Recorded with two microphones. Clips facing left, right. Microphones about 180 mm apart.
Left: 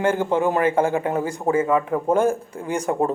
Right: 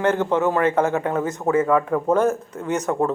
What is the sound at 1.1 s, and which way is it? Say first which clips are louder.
Speech: right 1 dB; 30° left (ahead or behind).